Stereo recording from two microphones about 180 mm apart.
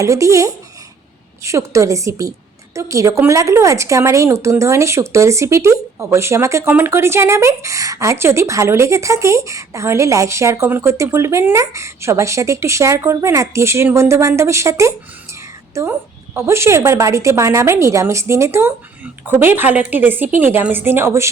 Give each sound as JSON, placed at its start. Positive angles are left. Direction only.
{"t": 0.0, "sound": "speech", "side_deg": -15}